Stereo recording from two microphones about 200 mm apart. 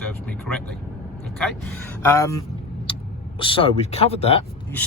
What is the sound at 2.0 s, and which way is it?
Speech, 15° left (ahead or behind).